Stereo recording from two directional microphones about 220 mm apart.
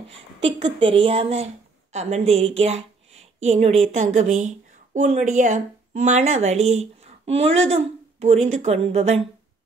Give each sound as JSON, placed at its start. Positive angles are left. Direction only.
{"t": 0.7, "sound": "a woman's voice", "side_deg": -25}